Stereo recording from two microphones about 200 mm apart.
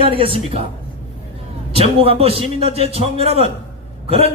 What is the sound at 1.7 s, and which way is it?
A man's voice, 30° right (ahead or behind).